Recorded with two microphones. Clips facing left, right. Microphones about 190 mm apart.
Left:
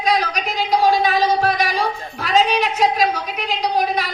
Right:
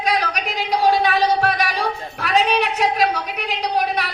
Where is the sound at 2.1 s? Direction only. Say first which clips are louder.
Left 1 dB; 65° right (ahead or behind).